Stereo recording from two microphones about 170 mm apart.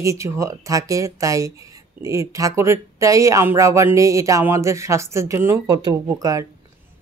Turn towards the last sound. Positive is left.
turn(degrees=-20)  # may be behind; listen again after turning